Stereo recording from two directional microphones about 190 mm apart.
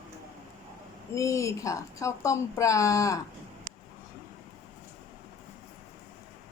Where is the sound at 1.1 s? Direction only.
15° left (ahead or behind).